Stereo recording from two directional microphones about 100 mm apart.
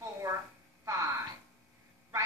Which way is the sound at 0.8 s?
30° right (ahead or behind).